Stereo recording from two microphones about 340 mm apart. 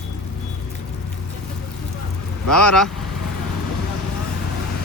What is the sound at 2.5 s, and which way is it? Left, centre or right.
Speech, centre.